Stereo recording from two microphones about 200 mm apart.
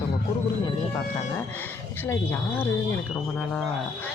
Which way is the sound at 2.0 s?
10° left (ahead or behind).